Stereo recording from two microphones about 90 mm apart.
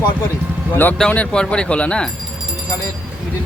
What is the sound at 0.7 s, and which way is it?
Speech, 20° left (ahead or behind).